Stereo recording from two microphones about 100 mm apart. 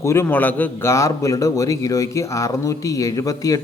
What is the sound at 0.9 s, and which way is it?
A man's voice, 30° left (ahead or behind).